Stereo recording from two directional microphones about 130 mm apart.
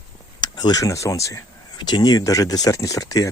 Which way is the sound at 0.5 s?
30° left (ahead or behind).